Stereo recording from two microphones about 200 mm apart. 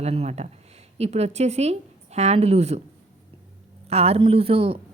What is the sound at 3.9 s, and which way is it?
Speech, 30° right (ahead or behind).